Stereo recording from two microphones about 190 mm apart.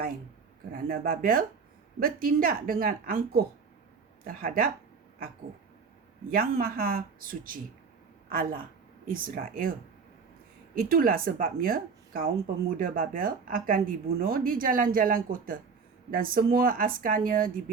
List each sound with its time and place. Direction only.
0.7 s a woman's voice: 50° right (ahead or behind)
6.3 s a woman's voice: 50° right (ahead or behind)
10.8 s a woman's voice: 50° right (ahead or behind)